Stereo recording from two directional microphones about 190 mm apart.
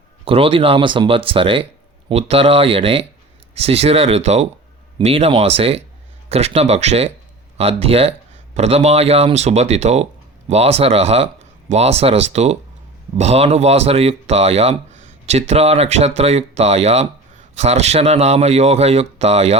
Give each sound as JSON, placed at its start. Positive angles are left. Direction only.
{"t": 0.3, "sound": "speech", "side_deg": -30}